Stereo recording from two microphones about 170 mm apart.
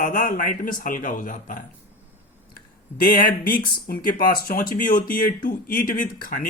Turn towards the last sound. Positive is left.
turn(degrees=55)  # may be behind; listen again after turning